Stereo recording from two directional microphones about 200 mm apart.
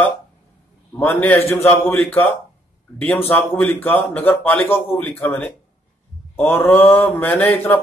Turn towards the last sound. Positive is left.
turn(degrees=10)  # may be behind; listen again after turning